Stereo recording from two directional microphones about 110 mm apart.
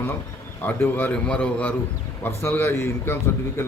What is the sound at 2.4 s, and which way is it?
Speech, 20° left (ahead or behind).